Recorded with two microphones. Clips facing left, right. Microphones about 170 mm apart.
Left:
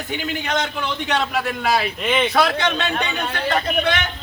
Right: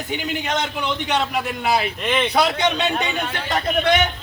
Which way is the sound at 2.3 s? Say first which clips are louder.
Even; 15° right (ahead or behind).